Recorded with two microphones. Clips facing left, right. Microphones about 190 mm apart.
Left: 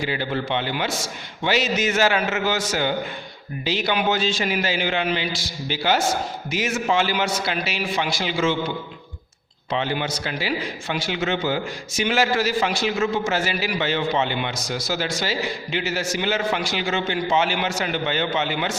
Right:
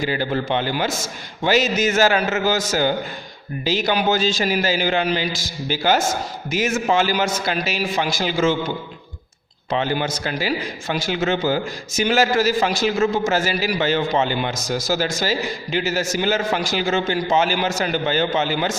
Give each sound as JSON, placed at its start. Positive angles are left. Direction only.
{"t": 0.0, "sound": "a man's voice", "side_deg": -40}
{"t": 9.6, "sound": "a man's voice", "side_deg": -45}